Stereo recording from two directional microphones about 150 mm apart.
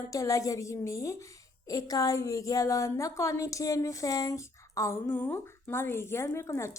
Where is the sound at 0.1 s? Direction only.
20° left (ahead or behind).